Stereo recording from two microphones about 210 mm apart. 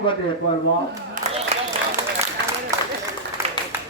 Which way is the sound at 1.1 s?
40° right (ahead or behind).